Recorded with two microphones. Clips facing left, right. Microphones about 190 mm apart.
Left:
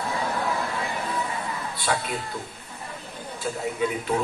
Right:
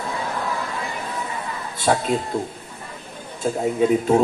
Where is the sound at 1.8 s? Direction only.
45° right (ahead or behind).